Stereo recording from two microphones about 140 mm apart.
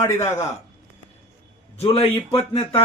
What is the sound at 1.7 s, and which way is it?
Speech, 45° left (ahead or behind).